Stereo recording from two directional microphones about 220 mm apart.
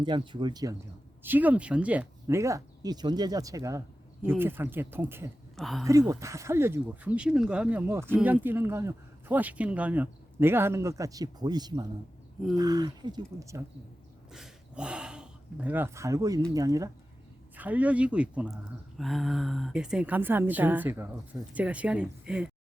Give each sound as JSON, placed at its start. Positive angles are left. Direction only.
{"t": 0.0, "sound": "speech", "side_deg": -20}
{"t": 5.5, "sound": "speech", "side_deg": 0}
{"t": 5.8, "sound": "speech", "side_deg": -15}
{"t": 14.3, "sound": "speech", "side_deg": -5}